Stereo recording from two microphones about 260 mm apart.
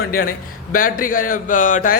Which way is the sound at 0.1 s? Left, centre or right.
Left.